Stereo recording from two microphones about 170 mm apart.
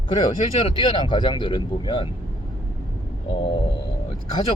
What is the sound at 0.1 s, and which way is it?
Speech, 30° left (ahead or behind).